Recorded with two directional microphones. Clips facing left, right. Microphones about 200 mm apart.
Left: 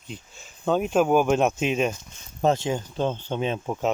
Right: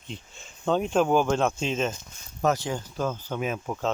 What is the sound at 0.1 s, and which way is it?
Speech, centre (ahead or behind).